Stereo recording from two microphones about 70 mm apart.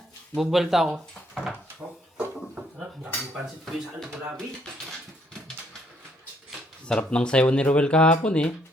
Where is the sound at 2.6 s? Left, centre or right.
Centre.